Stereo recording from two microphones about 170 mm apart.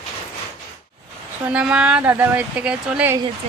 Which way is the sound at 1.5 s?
5° right (ahead or behind).